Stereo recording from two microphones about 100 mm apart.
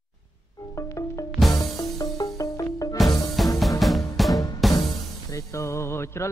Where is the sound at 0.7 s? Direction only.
30° left (ahead or behind).